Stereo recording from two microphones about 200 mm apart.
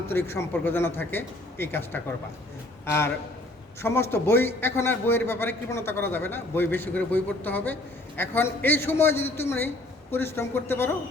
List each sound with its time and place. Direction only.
0.1 s a man's voice: 10° left (ahead or behind)